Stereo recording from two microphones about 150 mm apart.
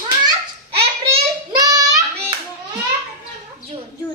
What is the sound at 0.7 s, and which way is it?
Babbling, 40° right (ahead or behind).